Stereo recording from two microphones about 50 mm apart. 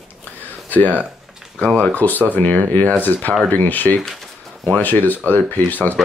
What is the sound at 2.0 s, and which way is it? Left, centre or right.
Speech, left.